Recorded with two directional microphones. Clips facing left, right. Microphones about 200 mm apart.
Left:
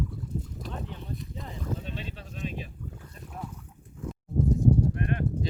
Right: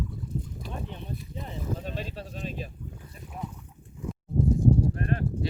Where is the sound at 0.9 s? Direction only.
15° right (ahead or behind).